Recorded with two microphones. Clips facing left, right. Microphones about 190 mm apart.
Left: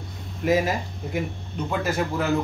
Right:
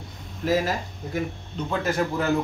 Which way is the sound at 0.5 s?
15° left (ahead or behind).